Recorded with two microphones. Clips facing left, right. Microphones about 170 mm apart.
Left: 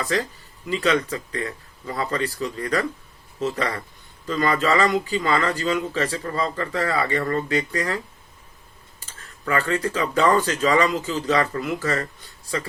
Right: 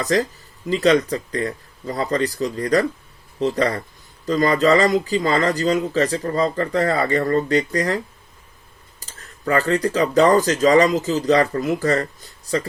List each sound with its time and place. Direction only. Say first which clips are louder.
0.7 s speech: right 5 dB; 40° right (ahead or behind)